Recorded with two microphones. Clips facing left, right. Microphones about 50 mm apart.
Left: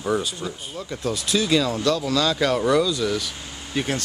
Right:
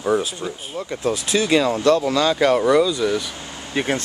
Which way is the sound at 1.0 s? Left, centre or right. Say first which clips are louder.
Right 3 dB; right.